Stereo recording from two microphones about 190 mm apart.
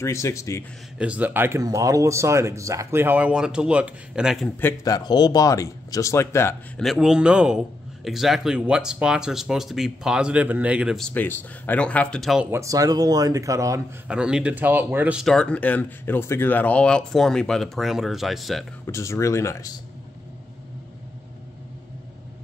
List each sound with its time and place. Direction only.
0.0 s speech: 15° left (ahead or behind)
0.9 s speech: 5° right (ahead or behind)
4.6 s speech: 15° left (ahead or behind)
6.8 s speech: centre (ahead or behind)
12.4 s speech: 15° right (ahead or behind)
14.0 s speech: 5° right (ahead or behind)
18.9 s speech: 15° left (ahead or behind)